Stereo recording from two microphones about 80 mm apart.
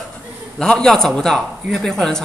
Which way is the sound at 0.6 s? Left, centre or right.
Centre.